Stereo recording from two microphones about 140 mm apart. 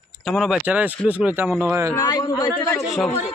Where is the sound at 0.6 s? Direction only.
10° right (ahead or behind).